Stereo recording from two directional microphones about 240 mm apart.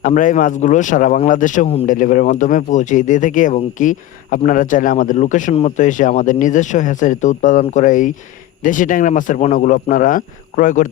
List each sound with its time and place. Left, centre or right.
0.0 s speech: left